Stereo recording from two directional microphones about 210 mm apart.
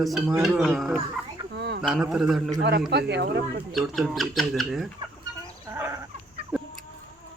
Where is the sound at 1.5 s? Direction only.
55° right (ahead or behind).